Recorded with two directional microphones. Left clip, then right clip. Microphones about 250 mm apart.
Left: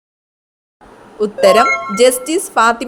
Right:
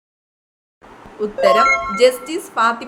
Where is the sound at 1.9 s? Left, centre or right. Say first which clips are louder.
Left 3 dB; left.